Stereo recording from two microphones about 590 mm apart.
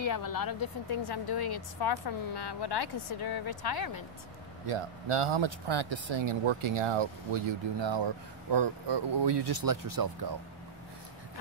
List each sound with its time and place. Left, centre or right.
0.0 s a woman's voice: left
4.6 s speech: right